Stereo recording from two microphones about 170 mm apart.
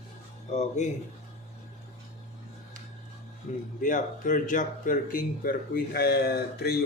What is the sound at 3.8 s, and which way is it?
Speech, 50° left (ahead or behind).